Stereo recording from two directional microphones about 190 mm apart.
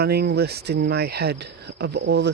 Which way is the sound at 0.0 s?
55° right (ahead or behind).